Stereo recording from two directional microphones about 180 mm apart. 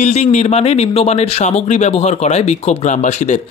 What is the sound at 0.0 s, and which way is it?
Speech, 40° left (ahead or behind).